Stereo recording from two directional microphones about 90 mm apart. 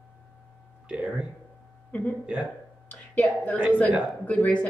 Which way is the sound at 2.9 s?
15° left (ahead or behind).